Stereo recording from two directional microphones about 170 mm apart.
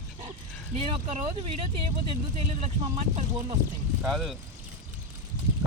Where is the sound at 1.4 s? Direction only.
35° right (ahead or behind).